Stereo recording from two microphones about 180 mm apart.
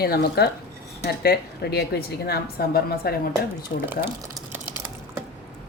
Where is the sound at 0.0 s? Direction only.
60° left (ahead or behind).